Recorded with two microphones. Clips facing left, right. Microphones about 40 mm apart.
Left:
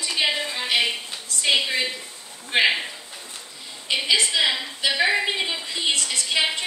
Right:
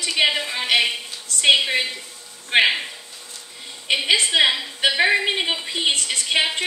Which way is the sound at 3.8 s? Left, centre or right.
Right.